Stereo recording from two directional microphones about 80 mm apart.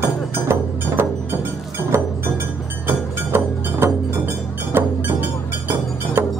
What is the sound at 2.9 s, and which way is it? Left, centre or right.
Music, right.